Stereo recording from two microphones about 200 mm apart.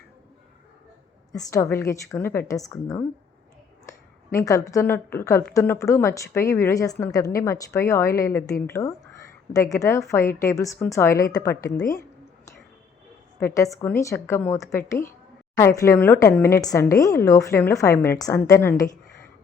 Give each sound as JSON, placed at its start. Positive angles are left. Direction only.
{"t": 1.3, "sound": "a woman's voice", "side_deg": 15}
{"t": 4.3, "sound": "a woman's voice", "side_deg": 15}
{"t": 13.4, "sound": "a woman's voice", "side_deg": 15}